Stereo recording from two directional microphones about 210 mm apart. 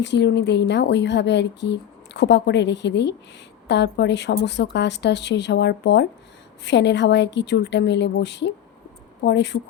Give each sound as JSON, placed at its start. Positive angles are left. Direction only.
{"t": 0.0, "sound": "speech", "side_deg": 55}